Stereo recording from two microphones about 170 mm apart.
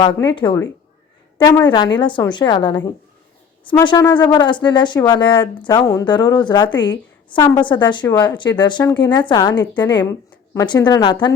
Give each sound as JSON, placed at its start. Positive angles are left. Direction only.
{"t": 0.0, "sound": "speech", "side_deg": 25}